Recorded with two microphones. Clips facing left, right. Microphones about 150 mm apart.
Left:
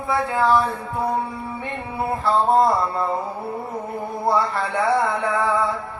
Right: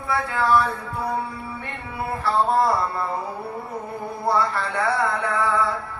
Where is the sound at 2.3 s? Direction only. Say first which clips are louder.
Left 3 dB; 20° left (ahead or behind).